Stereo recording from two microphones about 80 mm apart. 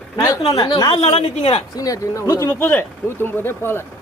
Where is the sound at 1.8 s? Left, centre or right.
Left.